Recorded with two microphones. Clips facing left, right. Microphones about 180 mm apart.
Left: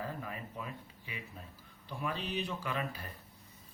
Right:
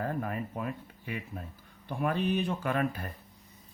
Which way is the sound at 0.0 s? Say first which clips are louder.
Right 8 dB; 55° right (ahead or behind).